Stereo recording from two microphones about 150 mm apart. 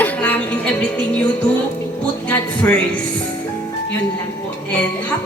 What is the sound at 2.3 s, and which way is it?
Speech, 10° left (ahead or behind).